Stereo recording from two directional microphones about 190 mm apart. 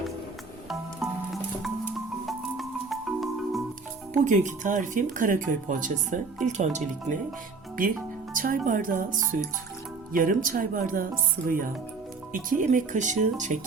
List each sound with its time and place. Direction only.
2.2 s marimba: centre (ahead or behind)
4.2 s speech: 40° right (ahead or behind)
8.3 s speech: 45° right (ahead or behind)